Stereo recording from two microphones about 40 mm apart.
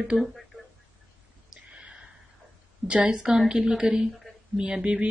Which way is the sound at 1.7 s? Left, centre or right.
Right.